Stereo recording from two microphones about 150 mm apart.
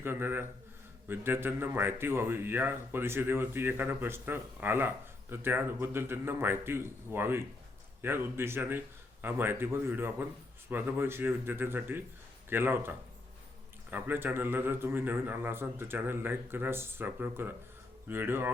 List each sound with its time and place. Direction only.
0.0 s a man's voice: 15° right (ahead or behind)
13.9 s a man's voice: 15° right (ahead or behind)